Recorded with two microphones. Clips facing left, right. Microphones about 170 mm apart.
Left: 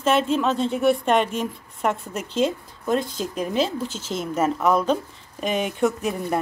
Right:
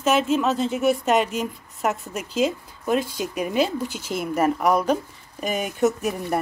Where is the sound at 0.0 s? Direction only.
5° right (ahead or behind).